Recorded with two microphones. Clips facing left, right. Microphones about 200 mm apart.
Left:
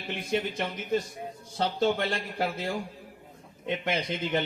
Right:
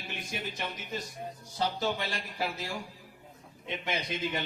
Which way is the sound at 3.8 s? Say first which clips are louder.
Left 2 dB; 60° left (ahead or behind).